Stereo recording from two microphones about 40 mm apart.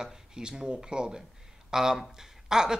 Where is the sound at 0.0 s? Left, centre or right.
Centre.